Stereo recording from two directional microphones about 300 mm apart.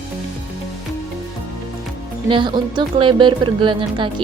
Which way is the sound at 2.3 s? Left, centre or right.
Centre.